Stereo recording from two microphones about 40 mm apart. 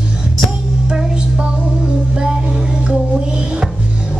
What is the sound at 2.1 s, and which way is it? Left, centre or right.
Music, right.